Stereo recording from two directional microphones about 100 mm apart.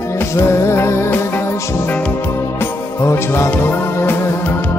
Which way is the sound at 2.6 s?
25° left (ahead or behind).